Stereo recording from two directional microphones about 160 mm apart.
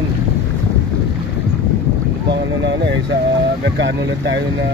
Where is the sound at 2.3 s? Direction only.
90° right.